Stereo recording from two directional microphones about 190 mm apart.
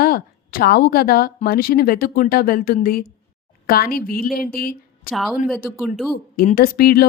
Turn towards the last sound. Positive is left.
turn(degrees=55)  # may be behind; listen again after turning